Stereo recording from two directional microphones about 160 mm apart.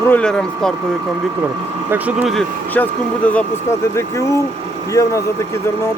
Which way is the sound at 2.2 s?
Centre (ahead or behind).